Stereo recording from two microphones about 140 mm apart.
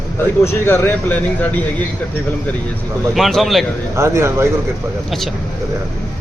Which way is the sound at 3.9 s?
20° right (ahead or behind).